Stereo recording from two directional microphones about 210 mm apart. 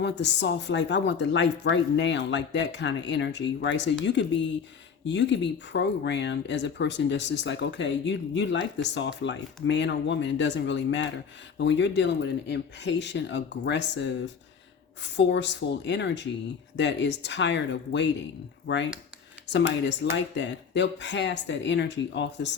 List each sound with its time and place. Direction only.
0.0 s speech: 55° left (ahead or behind)
19.5 s speech: 55° left (ahead or behind)